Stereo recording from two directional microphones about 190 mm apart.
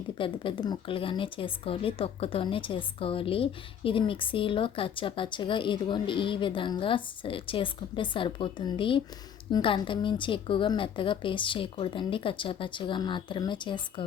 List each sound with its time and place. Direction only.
0.2 s a woman's voice: 25° left (ahead or behind)